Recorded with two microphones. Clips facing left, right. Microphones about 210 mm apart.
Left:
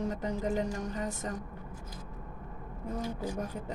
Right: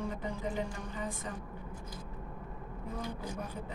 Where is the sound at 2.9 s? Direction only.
45° left (ahead or behind).